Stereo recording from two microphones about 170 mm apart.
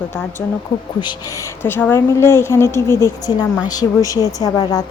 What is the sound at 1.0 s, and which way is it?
A woman's voice, 25° left (ahead or behind).